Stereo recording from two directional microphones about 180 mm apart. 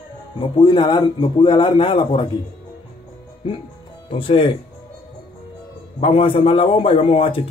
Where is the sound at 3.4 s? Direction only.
30° left (ahead or behind).